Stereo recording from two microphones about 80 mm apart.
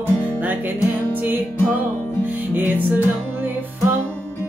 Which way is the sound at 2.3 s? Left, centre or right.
Right.